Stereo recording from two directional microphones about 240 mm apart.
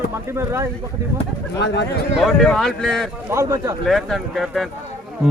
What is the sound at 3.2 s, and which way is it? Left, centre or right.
Speech, centre.